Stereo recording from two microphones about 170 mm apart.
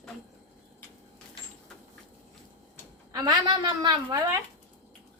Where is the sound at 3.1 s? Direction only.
25° right (ahead or behind).